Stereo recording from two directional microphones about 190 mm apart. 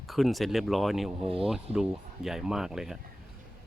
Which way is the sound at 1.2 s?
30° right (ahead or behind).